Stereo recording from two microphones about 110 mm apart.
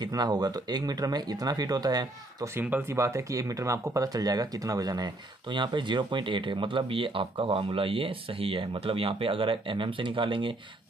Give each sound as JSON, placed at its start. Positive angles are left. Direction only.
{"t": 0.0, "sound": "speech", "side_deg": -35}
{"t": 2.5, "sound": "speech", "side_deg": -20}